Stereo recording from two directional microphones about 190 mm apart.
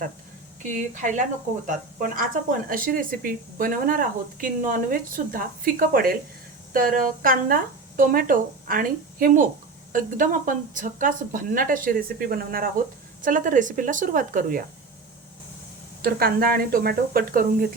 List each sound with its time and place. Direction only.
0.6 s speech: 40° right (ahead or behind)
16.0 s speech: 50° right (ahead or behind)